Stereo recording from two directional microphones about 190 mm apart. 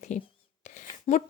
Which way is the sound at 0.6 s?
40° left (ahead or behind).